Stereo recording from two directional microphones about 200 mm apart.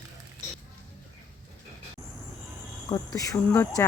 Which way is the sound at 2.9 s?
15° left (ahead or behind).